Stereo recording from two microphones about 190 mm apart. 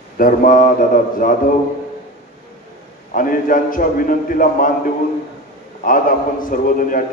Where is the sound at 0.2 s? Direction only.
45° left (ahead or behind).